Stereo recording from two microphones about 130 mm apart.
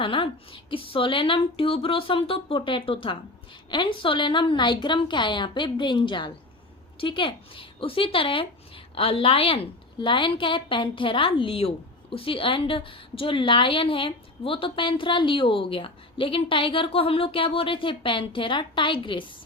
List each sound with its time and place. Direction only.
0.0 s a woman's voice: 40° left (ahead or behind)